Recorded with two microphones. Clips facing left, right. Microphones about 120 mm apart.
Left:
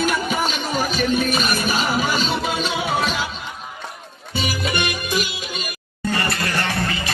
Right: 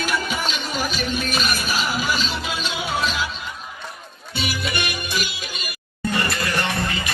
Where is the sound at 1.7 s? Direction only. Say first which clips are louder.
Left 3 dB; 50° left (ahead or behind).